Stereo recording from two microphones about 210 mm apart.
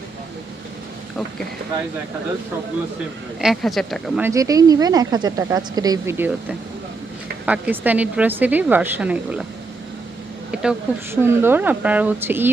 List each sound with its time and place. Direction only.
3.4 s speech: centre (ahead or behind)
4.2 s speech: 15° right (ahead or behind)
10.5 s speech: 5° right (ahead or behind)